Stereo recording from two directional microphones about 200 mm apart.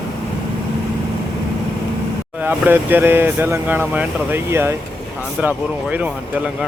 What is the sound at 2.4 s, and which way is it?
Speech, 10° right (ahead or behind).